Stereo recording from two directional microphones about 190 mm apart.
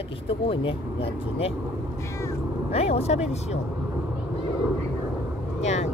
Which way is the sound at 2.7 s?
35° left (ahead or behind).